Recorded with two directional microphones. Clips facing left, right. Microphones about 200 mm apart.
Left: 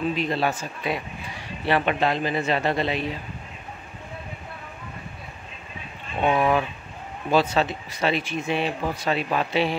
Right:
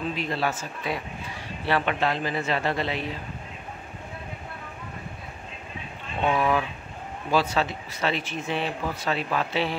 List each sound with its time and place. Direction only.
0.2 s a man's voice: 20° left (ahead or behind)
6.2 s a man's voice: 20° left (ahead or behind)